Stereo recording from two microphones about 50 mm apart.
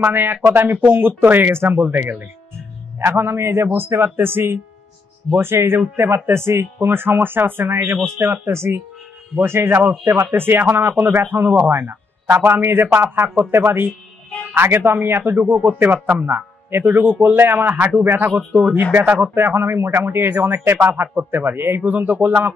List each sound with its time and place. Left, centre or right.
0.0 s a man's voice: right
3.0 s a man's voice: right
18.0 s speech: right
18.8 s a man's voice: right
19.3 s speech: right